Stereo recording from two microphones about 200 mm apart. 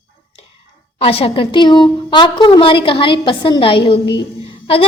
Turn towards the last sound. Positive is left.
turn(degrees=30)  # may be behind; listen again after turning